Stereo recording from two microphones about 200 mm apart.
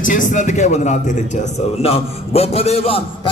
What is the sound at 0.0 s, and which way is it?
Music, 40° left (ahead or behind).